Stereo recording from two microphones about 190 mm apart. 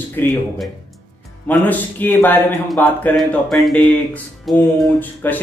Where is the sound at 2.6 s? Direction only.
5° left (ahead or behind).